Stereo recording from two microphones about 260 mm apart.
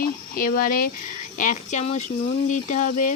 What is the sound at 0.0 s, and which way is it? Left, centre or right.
Speech, left.